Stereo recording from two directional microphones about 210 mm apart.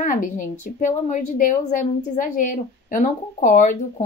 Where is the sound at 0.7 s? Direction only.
35° left (ahead or behind).